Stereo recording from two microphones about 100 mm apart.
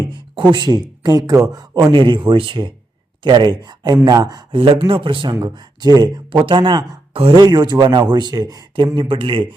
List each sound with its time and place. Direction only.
0.1 s speech: 50° right (ahead or behind)
2.0 s speech: 55° right (ahead or behind)
4.5 s speech: 55° right (ahead or behind)
5.3 s speech: 45° right (ahead or behind); by 7.3 s 65° right (ahead or behind)
7.3 s speech: 50° right (ahead or behind)
9.0 s speech: 60° right (ahead or behind)